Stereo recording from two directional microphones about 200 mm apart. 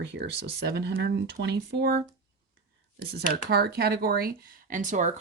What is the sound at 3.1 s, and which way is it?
Speech, 55° right (ahead or behind).